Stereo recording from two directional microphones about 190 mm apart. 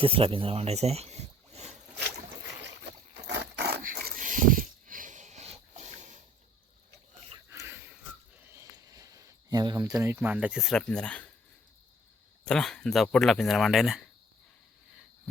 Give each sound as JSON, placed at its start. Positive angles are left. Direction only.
{"t": 0.0, "sound": "speech", "side_deg": -30}
{"t": 3.2, "sound": "dog", "side_deg": -60}
{"t": 7.3, "sound": "a sound", "side_deg": -15}
{"t": 8.5, "sound": "speech", "side_deg": -15}
{"t": 12.5, "sound": "speech", "side_deg": 5}